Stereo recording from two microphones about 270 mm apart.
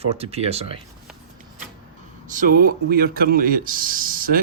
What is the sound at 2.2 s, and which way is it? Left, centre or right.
Speech, right.